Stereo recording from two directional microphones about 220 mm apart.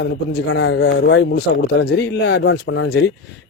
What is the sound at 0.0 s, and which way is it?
Speech, 50° left (ahead or behind).